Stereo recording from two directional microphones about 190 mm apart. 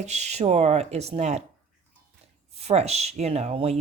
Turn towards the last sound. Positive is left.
turn(degrees=-30)  # may be behind; listen again after turning